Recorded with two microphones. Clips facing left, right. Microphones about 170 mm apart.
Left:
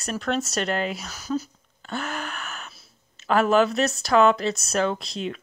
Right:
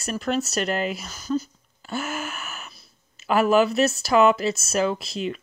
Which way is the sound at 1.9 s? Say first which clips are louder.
Right 1 dB; 5° right (ahead or behind).